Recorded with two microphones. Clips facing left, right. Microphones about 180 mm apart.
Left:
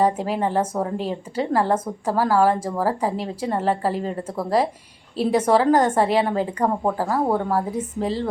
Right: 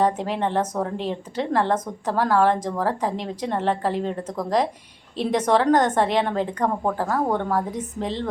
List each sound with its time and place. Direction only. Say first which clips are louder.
0.0 s speech: left 1 dB; 5° left (ahead or behind)